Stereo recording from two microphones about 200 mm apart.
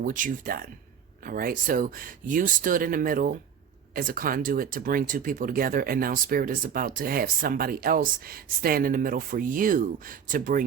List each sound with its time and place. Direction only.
0.0 s speech: 40° right (ahead or behind)